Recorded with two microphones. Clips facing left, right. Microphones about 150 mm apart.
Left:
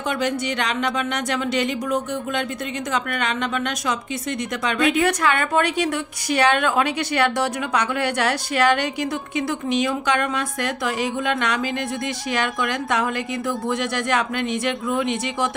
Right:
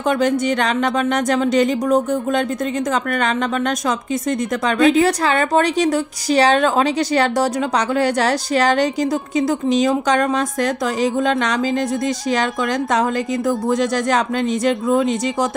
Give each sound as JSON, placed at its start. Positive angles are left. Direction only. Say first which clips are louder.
{"t": 0.2, "sound": "a woman's voice", "louder": "right 6 dB", "side_deg": -45}
{"t": 13.5, "sound": "a woman's voice", "louder": "right 6 dB", "side_deg": -40}